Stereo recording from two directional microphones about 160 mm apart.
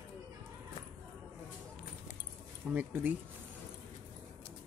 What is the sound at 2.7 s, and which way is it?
Speech, 10° right (ahead or behind).